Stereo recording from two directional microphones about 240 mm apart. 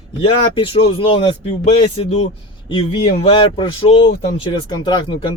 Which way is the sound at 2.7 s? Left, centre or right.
Left.